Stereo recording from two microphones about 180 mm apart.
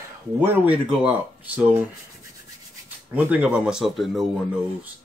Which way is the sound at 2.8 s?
10° right (ahead or behind).